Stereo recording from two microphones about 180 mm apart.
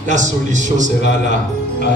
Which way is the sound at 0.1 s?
45° right (ahead or behind).